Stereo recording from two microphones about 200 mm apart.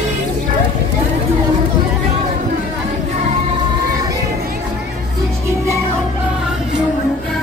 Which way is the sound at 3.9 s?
15° right (ahead or behind).